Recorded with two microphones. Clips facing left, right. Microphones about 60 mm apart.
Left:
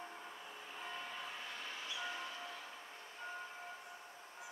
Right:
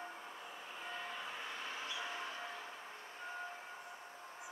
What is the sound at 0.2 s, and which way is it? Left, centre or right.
Vehicle, centre.